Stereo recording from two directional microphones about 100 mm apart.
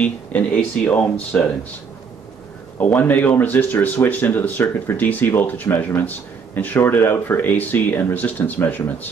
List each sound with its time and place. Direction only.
0.0 s speech: 15° left (ahead or behind)
2.8 s speech: 15° left (ahead or behind)